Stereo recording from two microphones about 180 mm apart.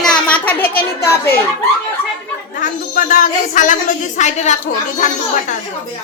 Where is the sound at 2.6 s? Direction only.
45° left (ahead or behind).